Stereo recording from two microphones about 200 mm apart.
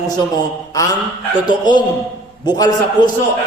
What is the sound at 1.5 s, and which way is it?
A man's voice, 20° left (ahead or behind).